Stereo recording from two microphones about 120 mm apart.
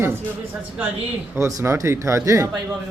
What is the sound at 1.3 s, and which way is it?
Speech, 20° right (ahead or behind).